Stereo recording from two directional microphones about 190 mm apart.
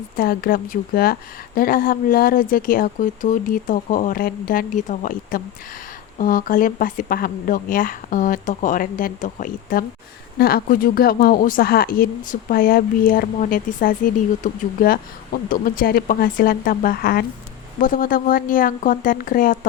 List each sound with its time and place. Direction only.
0.2 s a woman's voice: 50° left (ahead or behind)